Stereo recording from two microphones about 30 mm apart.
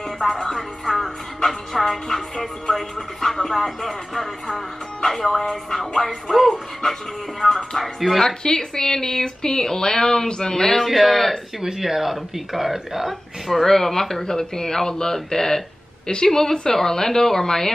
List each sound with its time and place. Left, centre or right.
0.3 s speech: centre
6.5 s speech: centre
8.5 s speech: left
10.8 s speech: centre
11.6 s speech: centre
13.5 s speech: centre